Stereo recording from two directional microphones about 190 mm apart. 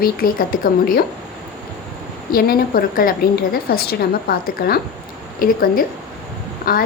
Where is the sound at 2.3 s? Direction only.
50° left (ahead or behind).